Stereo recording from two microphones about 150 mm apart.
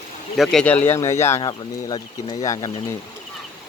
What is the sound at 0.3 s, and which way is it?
Speech, 5° left (ahead or behind).